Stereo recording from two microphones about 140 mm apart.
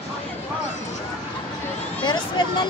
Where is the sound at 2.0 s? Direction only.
35° left (ahead or behind).